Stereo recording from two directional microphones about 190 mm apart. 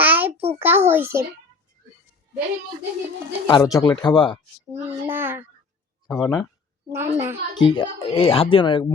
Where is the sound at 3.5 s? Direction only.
20° left (ahead or behind).